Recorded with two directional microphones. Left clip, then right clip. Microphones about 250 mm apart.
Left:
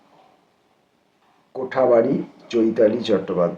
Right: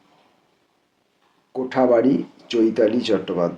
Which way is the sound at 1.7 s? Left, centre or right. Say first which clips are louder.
Left 1 dB; right.